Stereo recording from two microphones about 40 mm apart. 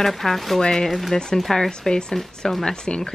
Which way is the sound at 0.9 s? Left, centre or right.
Centre.